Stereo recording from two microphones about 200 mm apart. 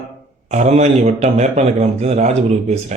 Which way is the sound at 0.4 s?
35° right (ahead or behind).